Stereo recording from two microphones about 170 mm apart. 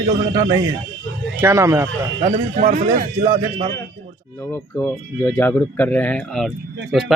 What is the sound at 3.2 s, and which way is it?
Speech, 30° right (ahead or behind).